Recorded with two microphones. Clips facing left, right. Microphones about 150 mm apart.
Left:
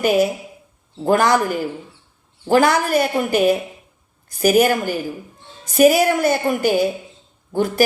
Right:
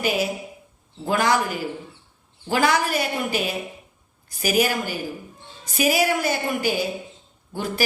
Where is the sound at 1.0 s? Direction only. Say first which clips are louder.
Left 5 dB; 50° left (ahead or behind).